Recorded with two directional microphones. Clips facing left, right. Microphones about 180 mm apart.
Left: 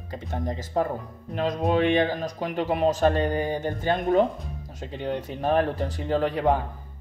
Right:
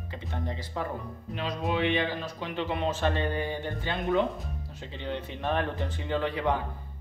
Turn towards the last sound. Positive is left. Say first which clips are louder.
# left 5 dB
turn(degrees=45)  # may be behind; listen again after turning